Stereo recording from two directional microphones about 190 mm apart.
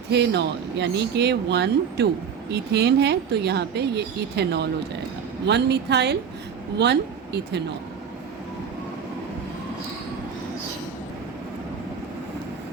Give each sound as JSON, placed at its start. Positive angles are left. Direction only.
{"t": 0.1, "sound": "speech", "side_deg": -65}